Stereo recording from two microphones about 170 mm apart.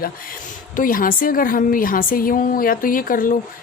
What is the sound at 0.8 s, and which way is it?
A woman's voice, 55° left (ahead or behind).